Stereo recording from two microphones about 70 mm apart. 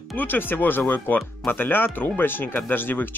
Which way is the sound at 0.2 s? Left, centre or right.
Left.